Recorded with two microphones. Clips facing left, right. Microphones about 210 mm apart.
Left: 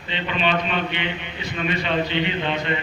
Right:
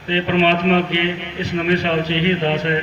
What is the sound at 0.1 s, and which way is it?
A man's voice, 80° right.